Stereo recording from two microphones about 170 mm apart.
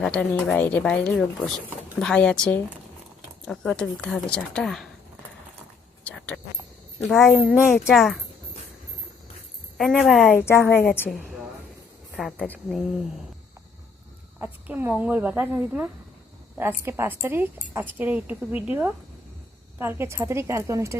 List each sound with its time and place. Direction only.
0.0 s speech: 5° left (ahead or behind)
6.1 s a sound: 10° left (ahead or behind)
7.1 s speech: centre (ahead or behind)
9.7 s speech: centre (ahead or behind)
10.4 s a woman's voice: 15° left (ahead or behind)
12.1 s speech: centre (ahead or behind)
14.3 s speech: 10° right (ahead or behind)